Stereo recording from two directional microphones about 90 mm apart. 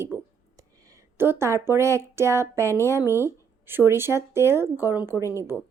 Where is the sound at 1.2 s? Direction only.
25° right (ahead or behind).